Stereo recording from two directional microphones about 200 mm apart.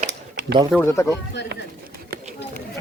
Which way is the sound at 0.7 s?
10° left (ahead or behind).